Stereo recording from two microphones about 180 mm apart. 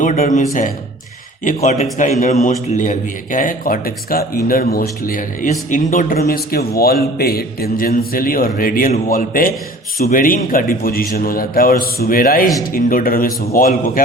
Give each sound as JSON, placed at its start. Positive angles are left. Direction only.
{"t": 0.0, "sound": "a man's voice", "side_deg": 45}
{"t": 1.5, "sound": "a man's voice", "side_deg": 45}